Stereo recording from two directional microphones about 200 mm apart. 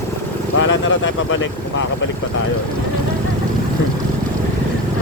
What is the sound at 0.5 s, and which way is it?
Speech, 70° left (ahead or behind).